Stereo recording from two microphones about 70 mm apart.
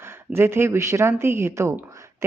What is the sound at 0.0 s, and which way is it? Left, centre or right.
Speech, right.